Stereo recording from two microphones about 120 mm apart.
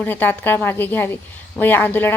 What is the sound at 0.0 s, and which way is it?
A woman's voice, 15° left (ahead or behind).